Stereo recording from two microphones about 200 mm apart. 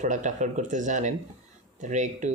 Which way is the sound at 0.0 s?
35° right (ahead or behind).